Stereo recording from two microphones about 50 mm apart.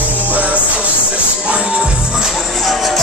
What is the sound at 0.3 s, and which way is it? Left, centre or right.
Music, right.